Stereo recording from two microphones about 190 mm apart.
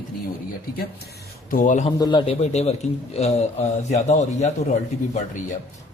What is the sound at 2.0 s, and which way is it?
Speech, 25° left (ahead or behind).